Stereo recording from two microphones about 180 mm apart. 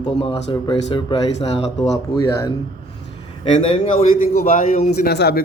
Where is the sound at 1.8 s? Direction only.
20° left (ahead or behind).